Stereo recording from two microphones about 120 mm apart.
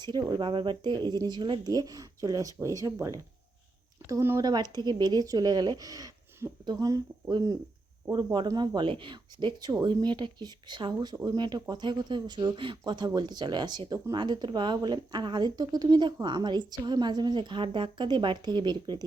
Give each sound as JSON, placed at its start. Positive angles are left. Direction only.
{"t": 0.0, "sound": "speech", "side_deg": -35}
{"t": 4.4, "sound": "speech", "side_deg": -35}